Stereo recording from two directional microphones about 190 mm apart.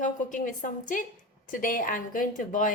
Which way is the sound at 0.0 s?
40° left (ahead or behind).